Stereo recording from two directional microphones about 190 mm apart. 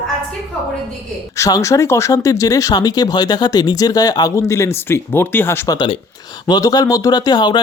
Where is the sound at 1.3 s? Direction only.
15° left (ahead or behind).